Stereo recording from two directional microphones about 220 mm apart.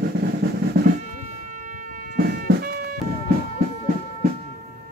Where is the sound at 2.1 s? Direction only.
40° right (ahead or behind).